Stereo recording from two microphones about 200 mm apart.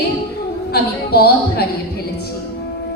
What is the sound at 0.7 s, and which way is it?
Speech, 50° left (ahead or behind).